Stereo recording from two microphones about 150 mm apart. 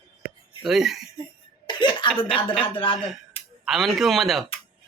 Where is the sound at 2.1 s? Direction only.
35° left (ahead or behind).